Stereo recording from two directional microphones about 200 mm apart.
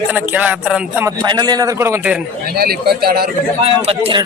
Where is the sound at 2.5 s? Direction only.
50° right (ahead or behind).